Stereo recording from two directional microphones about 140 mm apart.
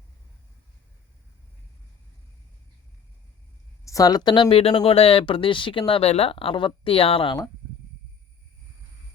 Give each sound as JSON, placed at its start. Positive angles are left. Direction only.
{"t": 3.8, "sound": "speech", "side_deg": 25}